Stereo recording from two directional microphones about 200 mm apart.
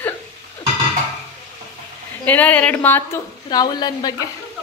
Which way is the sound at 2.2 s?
10° left (ahead or behind).